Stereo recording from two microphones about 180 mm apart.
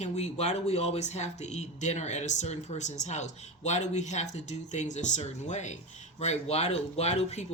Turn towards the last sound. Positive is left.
turn(degrees=35)  # may be behind; listen again after turning